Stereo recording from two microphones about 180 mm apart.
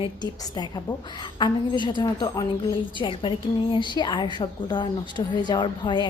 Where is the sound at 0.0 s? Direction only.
25° left (ahead or behind).